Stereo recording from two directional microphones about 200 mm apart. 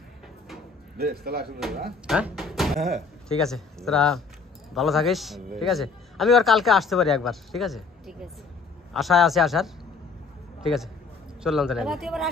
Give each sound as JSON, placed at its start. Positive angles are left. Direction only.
{"t": 0.9, "sound": "speech", "side_deg": -50}
{"t": 2.0, "sound": "a man's voice", "side_deg": -5}
{"t": 11.4, "sound": "a man's voice", "side_deg": 0}